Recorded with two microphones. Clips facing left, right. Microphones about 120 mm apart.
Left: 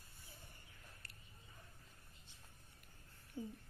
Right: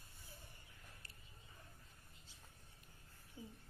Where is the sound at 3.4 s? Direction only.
55° left (ahead or behind).